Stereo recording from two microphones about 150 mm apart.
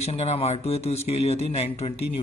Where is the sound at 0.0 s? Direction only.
45° left (ahead or behind).